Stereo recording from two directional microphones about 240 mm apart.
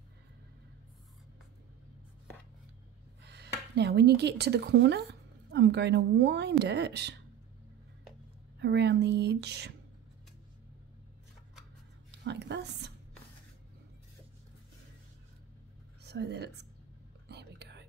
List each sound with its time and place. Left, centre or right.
3.2 s speech: right
8.5 s speech: right
12.1 s a woman's voice: right
16.0 s speech: right
17.3 s whispering: right